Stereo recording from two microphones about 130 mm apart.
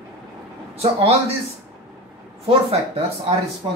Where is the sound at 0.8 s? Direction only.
50° right (ahead or behind).